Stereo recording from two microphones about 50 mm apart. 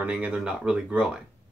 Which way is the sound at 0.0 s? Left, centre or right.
Right.